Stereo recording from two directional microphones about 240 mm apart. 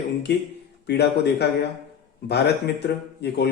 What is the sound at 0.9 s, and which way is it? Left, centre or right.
Speech, left.